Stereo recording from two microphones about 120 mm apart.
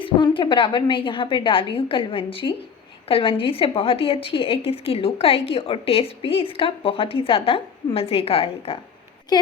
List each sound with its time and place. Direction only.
0.0 s a woman's voice: 45° left (ahead or behind)
9.3 s a woman's voice: 35° left (ahead or behind)